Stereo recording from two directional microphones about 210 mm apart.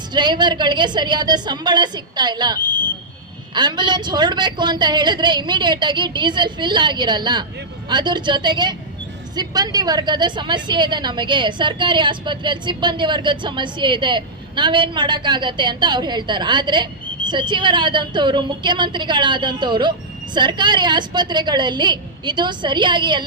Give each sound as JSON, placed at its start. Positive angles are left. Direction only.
{"t": 0.1, "sound": "a woman's voice", "side_deg": -20}
{"t": 2.6, "sound": "a sound", "side_deg": 10}
{"t": 3.5, "sound": "a woman's voice", "side_deg": -20}